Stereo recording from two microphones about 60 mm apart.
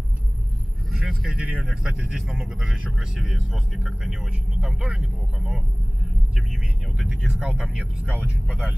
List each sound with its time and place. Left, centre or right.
0.9 s speech: centre; by 8.5 s right